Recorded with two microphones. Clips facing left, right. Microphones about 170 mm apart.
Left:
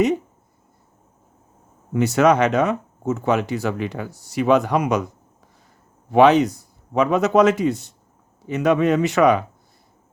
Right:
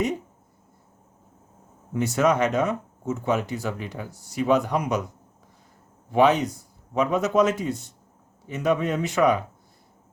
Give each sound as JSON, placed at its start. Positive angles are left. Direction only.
{"t": 1.9, "sound": "speech", "side_deg": 80}
{"t": 6.1, "sound": "speech", "side_deg": 80}